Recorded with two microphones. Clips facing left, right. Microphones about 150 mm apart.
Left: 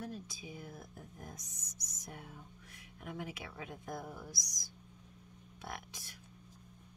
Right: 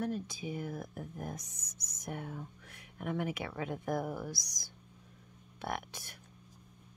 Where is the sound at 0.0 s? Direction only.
70° right (ahead or behind).